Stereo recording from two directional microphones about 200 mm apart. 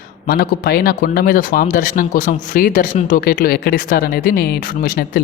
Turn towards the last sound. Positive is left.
turn(degrees=50)  # may be behind; listen again after turning